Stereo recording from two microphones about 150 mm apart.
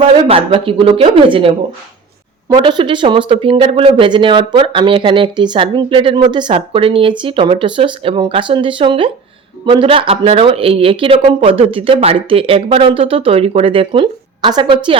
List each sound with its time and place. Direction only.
0.3 s speech: 35° right (ahead or behind)